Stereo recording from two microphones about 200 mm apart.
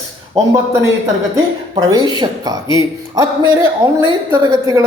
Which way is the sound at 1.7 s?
20° right (ahead or behind).